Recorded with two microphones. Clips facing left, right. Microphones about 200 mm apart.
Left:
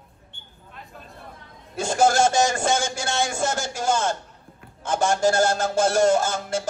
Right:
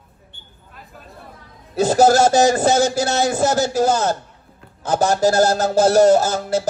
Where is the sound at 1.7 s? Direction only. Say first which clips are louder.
Right 6 dB; 40° right (ahead or behind).